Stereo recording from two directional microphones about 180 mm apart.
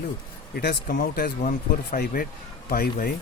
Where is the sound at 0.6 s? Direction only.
55° left (ahead or behind).